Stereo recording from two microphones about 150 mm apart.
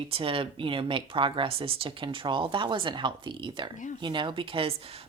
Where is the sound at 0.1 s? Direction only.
35° right (ahead or behind).